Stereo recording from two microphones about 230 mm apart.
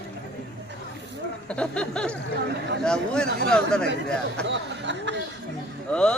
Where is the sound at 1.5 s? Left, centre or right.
Centre.